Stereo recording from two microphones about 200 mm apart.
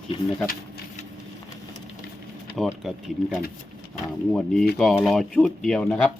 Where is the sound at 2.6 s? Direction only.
Centre (ahead or behind).